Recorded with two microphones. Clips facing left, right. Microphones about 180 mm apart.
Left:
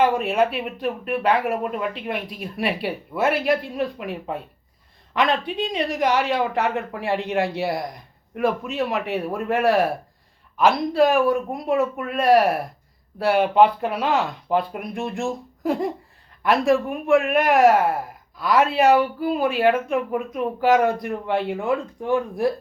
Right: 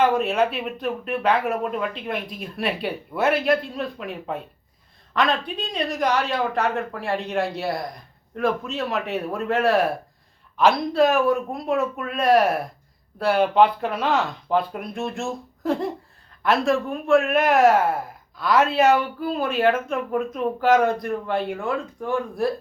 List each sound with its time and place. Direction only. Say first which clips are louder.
0.2 s speech: left 1 dB; 10° left (ahead or behind)